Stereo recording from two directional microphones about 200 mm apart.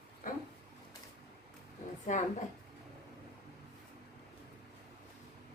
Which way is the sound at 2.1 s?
40° left (ahead or behind).